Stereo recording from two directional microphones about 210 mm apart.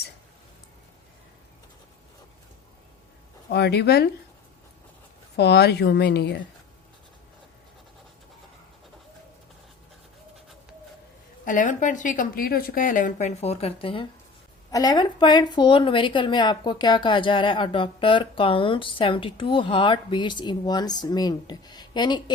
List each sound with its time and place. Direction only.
3.5 s a woman's voice: 50° left (ahead or behind)
5.4 s a woman's voice: 50° left (ahead or behind)
11.4 s a woman's voice: 40° left (ahead or behind); by 22.2 s 20° left (ahead or behind)